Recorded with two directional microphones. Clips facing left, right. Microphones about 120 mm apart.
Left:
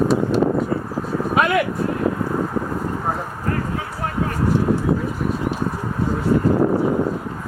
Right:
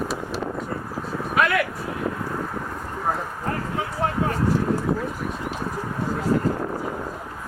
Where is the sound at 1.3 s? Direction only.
20° left (ahead or behind).